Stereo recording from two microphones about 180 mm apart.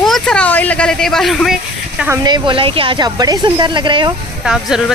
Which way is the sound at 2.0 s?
25° right (ahead or behind).